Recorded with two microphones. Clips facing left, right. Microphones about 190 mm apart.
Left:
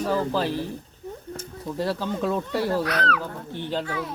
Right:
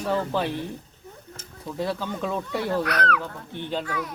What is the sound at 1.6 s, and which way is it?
Speech, 10° left (ahead or behind).